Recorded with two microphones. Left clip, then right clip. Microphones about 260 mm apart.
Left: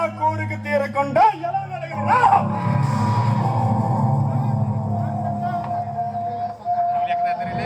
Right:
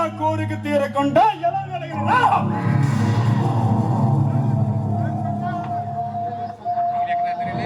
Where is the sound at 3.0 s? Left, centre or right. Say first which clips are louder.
Left 2 dB; right.